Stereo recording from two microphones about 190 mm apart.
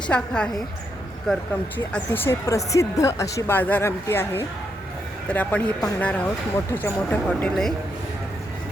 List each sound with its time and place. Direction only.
0.1 s a woman's voice: 5° left (ahead or behind)